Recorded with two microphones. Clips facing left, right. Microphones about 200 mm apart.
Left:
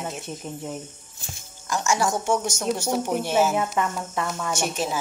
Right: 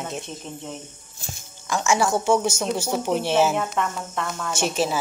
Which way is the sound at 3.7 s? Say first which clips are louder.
Left 1 dB; 5° left (ahead or behind).